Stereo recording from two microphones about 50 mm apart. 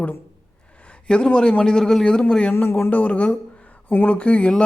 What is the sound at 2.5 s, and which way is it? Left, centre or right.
Speech, left.